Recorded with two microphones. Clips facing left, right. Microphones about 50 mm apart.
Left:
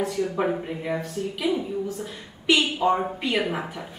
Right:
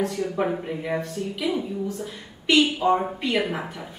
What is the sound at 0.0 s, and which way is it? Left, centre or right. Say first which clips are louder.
A woman's voice: even; centre.